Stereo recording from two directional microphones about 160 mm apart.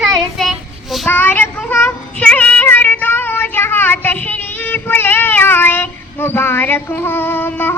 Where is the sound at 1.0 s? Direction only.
10° left (ahead or behind).